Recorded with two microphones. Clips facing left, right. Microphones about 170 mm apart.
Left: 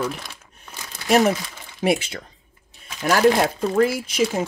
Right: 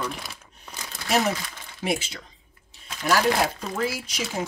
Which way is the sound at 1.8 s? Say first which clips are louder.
Left 7 dB; 60° left (ahead or behind).